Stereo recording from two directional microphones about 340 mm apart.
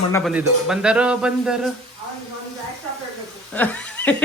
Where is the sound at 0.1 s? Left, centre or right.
Centre.